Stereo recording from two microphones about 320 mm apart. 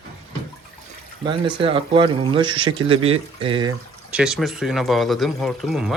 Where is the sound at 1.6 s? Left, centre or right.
Centre.